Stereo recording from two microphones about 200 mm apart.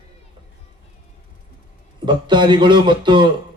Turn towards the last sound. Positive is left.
turn(degrees=-25)  # may be behind; listen again after turning